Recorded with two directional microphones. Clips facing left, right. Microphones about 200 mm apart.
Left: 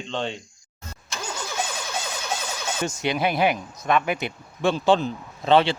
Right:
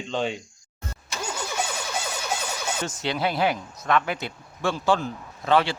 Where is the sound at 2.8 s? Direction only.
15° left (ahead or behind).